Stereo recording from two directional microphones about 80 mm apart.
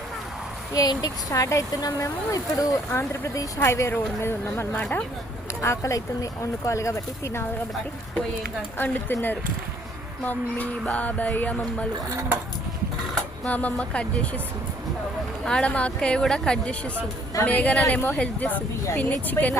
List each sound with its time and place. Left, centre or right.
0.7 s speech: left
1.3 s speech: left
5.6 s speech: left
8.8 s speech: left
10.2 s speech: centre
13.4 s a woman's voice: centre
15.4 s a woman's voice: centre
17.4 s a woman's voice: centre